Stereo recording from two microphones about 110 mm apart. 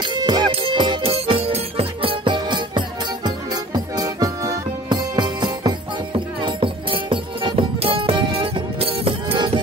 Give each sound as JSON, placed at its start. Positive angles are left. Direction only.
{"t": 0.0, "sound": "music", "side_deg": -45}
{"t": 0.5, "sound": "music", "side_deg": -55}
{"t": 1.1, "sound": "music", "side_deg": -60}